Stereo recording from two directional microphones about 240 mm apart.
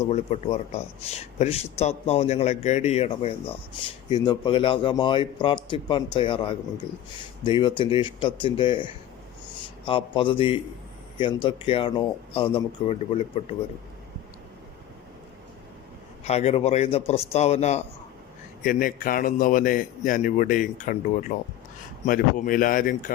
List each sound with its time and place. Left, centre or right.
0.0 s speech: left
16.2 s a man's voice: left